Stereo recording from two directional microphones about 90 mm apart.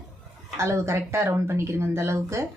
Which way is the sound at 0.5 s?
30° right (ahead or behind).